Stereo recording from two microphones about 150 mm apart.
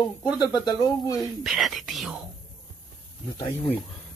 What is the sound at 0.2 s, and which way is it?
Speech, 25° left (ahead or behind).